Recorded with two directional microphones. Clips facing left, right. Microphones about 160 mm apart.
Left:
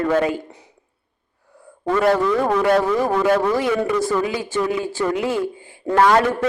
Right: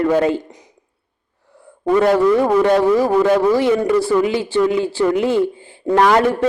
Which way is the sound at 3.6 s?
25° right (ahead or behind).